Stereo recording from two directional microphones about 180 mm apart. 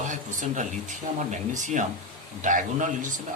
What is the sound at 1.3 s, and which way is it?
Speech, 45° right (ahead or behind).